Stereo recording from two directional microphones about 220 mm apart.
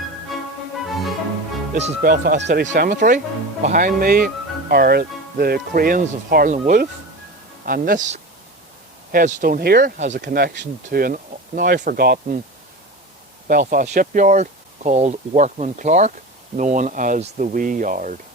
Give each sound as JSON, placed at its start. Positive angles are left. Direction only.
{"t": 1.7, "sound": "speech", "side_deg": -40}
{"t": 13.5, "sound": "speech", "side_deg": -40}